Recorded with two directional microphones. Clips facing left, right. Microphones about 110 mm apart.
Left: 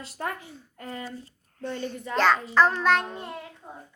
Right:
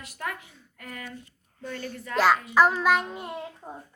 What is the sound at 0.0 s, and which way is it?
A woman's voice, 30° left (ahead or behind).